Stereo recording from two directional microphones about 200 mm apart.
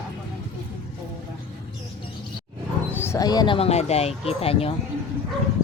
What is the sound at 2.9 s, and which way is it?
Speech, 10° left (ahead or behind).